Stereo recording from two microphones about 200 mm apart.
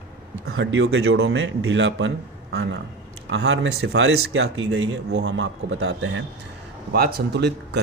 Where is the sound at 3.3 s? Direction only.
65° right (ahead or behind).